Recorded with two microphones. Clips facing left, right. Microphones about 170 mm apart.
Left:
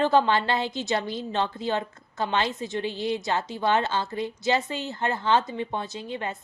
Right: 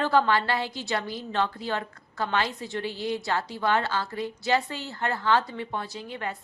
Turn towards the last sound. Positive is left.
turn(degrees=25)  # may be behind; listen again after turning